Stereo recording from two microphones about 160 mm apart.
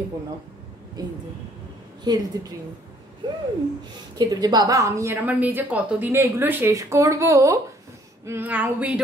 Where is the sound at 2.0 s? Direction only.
25° right (ahead or behind).